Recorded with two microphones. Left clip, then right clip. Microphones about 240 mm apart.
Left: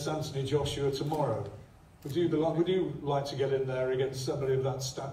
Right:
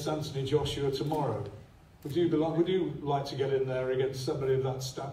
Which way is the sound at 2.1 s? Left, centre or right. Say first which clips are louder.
Right 1 dB; right.